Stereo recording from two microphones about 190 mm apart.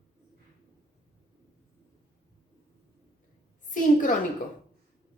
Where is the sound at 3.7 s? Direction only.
45° left (ahead or behind).